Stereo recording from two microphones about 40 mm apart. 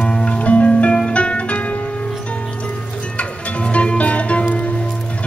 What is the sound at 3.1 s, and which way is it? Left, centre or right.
Music, left.